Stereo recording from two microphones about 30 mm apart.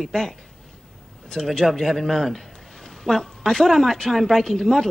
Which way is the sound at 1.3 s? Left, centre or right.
Left.